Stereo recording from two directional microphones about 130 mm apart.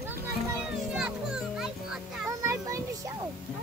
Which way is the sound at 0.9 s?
5° right (ahead or behind).